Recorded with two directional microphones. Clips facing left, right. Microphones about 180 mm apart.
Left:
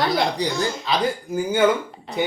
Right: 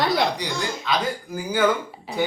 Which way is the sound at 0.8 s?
25° left (ahead or behind).